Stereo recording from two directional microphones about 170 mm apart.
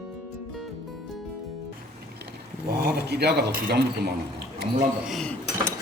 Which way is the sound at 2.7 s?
70° right (ahead or behind).